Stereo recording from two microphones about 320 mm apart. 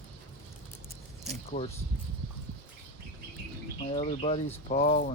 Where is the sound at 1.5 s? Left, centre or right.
Centre.